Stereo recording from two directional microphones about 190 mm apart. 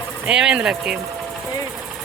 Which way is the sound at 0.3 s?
5° right (ahead or behind).